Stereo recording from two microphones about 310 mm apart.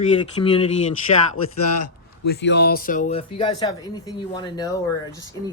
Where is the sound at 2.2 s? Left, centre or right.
Left.